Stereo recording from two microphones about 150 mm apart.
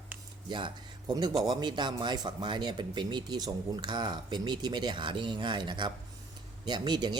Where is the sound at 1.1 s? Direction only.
30° right (ahead or behind).